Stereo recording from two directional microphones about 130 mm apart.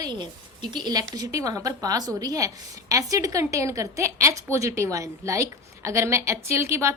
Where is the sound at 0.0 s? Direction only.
35° right (ahead or behind).